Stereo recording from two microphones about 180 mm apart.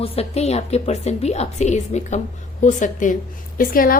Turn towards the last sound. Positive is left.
turn(degrees=50)  # may be behind; listen again after turning